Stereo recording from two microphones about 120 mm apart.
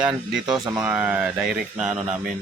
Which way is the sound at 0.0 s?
5° right (ahead or behind).